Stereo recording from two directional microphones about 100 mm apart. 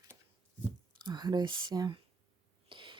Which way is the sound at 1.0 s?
45° right (ahead or behind).